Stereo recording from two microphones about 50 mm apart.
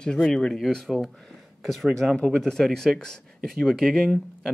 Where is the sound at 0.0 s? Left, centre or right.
Centre.